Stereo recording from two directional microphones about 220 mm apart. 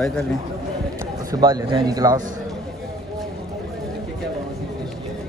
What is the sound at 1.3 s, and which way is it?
Speech, 20° right (ahead or behind).